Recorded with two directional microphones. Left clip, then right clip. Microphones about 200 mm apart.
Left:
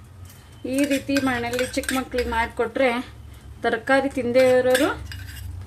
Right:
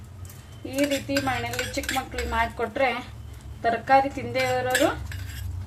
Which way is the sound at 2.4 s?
55° left (ahead or behind).